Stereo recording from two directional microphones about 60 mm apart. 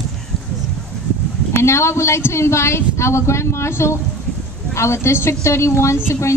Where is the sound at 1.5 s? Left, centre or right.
Left.